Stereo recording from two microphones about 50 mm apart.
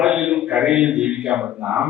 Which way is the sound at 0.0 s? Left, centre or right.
Centre.